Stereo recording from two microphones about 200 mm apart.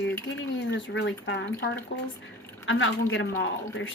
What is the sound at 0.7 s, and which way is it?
A woman's voice, 60° left (ahead or behind).